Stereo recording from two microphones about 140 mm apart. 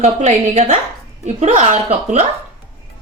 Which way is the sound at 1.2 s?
60° right (ahead or behind).